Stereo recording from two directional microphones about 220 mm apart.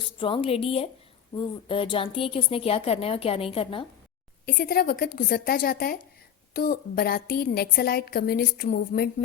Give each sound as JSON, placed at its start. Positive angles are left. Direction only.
{"t": 0.2, "sound": "a woman's voice", "side_deg": 25}
{"t": 4.4, "sound": "a woman's voice", "side_deg": 40}